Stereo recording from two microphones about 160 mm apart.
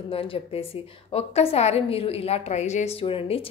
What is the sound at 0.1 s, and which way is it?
A woman's voice, 35° left (ahead or behind).